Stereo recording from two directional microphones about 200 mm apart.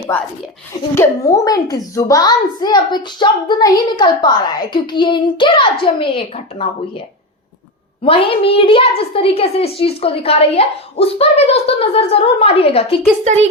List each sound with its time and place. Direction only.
0.9 s a child's voice: 15° left (ahead or behind)
8.0 s a child's voice: 30° left (ahead or behind)